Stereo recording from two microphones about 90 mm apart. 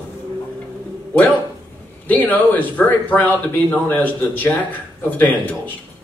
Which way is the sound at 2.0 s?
20° left (ahead or behind).